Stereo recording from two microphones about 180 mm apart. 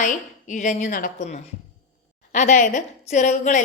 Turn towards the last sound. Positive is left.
turn(degrees=40)  # may be behind; listen again after turning